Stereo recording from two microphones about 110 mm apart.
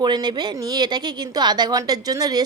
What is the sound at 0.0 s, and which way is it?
A woman's voice, 40° right (ahead or behind).